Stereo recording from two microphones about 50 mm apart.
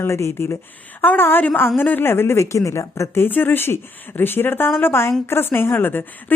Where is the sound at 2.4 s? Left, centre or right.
Left.